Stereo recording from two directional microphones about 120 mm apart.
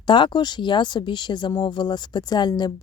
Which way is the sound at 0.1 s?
40° left (ahead or behind).